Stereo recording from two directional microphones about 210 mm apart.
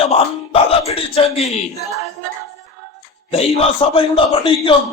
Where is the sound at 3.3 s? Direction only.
30° left (ahead or behind).